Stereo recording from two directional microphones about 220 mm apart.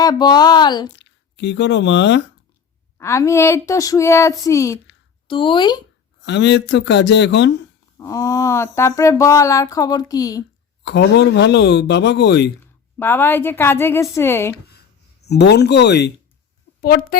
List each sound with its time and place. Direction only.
0.0 s speech: 20° left (ahead or behind)
0.9 s speech: 50° left (ahead or behind)
3.0 s speech: 15° left (ahead or behind)
6.2 s a man's voice: 55° left (ahead or behind)
7.9 s speech: 15° left (ahead or behind)
10.8 s a man's voice: 50° left (ahead or behind)
13.0 s speech: 10° left (ahead or behind)
15.3 s a man's voice: 50° left (ahead or behind)